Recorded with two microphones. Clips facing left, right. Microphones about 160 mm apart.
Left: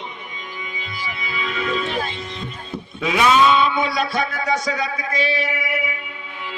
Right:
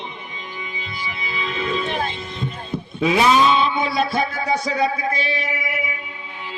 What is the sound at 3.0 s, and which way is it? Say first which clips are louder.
Speech: even; 30° right (ahead or behind).